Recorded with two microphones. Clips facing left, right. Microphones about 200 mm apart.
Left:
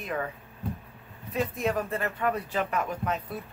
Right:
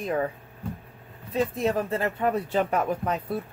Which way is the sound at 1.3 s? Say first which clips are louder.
Right 3 dB; 25° right (ahead or behind).